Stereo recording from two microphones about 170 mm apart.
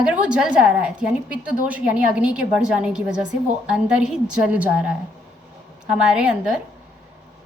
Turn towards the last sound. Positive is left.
turn(degrees=-5)  # may be behind; listen again after turning